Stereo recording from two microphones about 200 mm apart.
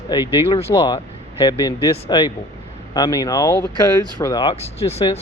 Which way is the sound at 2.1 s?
20° left (ahead or behind).